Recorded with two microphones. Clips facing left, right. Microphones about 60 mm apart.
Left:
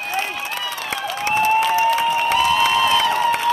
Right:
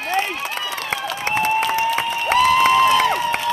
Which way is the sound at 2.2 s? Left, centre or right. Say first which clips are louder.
Right 6 dB; right.